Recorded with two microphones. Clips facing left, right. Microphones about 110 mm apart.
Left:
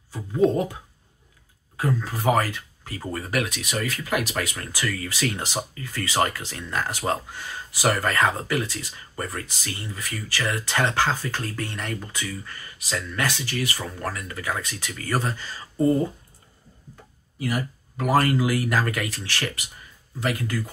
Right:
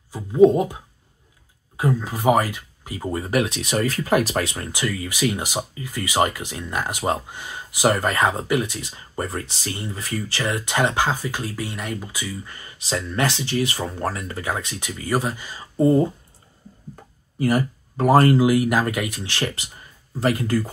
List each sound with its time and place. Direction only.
0.1 s speech: 15° right (ahead or behind)
1.8 s speech: 15° right (ahead or behind)
3.7 s speech: 35° right (ahead or behind); by 12.5 s 10° right (ahead or behind)
12.5 s speech: 25° right (ahead or behind)
17.4 s speech: 40° right (ahead or behind)